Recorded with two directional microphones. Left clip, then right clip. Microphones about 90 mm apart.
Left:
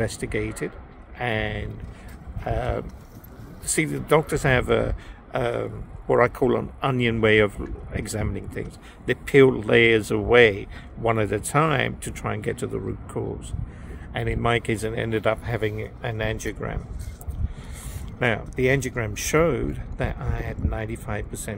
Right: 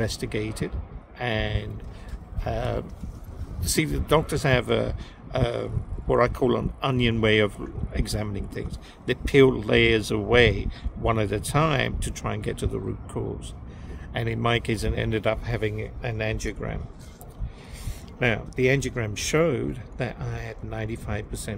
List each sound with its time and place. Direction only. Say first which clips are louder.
0.0 s a man's voice: left 2 dB; 30° right (ahead or behind)
18.2 s a man's voice: left 1 dB; 25° right (ahead or behind)